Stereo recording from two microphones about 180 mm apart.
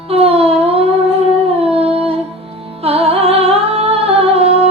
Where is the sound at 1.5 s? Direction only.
35° right (ahead or behind).